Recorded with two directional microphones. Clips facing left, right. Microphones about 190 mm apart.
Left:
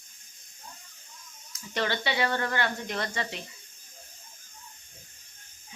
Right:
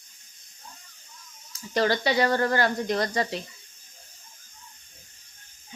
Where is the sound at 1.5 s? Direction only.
35° right (ahead or behind).